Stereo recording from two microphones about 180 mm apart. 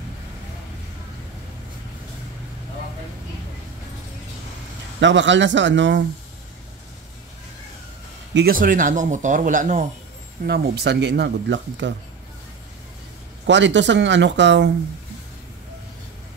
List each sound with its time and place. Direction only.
5.0 s speech: 90° right
8.3 s speech: 65° right (ahead or behind); by 9.8 s 45° right (ahead or behind)
10.4 s speech: 65° right (ahead or behind); by 11.9 s 90° right
13.5 s speech: 85° right